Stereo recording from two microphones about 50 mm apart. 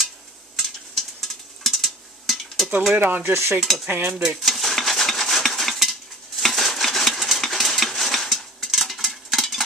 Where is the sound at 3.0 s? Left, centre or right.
Right.